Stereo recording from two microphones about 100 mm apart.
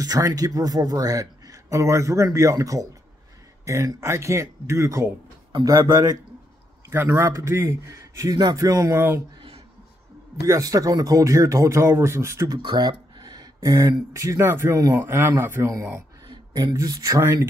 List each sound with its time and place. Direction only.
0.0 s speech: 40° right (ahead or behind)
8.9 s speech: 25° right (ahead or behind)
10.4 s speech: 35° right (ahead or behind)
12.4 s a sound: 45° right (ahead or behind)
13.6 s speech: 30° right (ahead or behind)
16.3 s speech: 40° right (ahead or behind)